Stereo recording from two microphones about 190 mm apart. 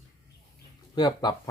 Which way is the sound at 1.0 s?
20° left (ahead or behind).